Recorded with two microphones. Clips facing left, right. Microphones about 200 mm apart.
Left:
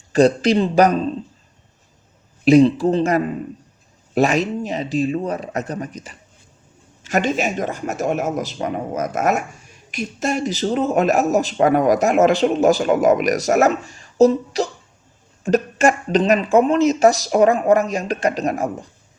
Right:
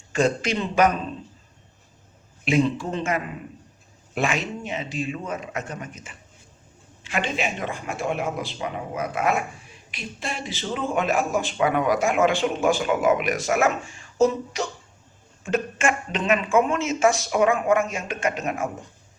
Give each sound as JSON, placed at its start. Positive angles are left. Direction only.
{"t": 0.1, "sound": "speech", "side_deg": 35}
{"t": 2.4, "sound": "speech", "side_deg": 35}